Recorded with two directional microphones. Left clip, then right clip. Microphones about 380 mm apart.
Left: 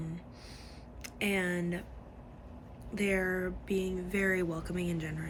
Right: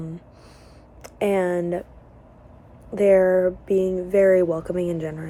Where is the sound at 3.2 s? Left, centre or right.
Right.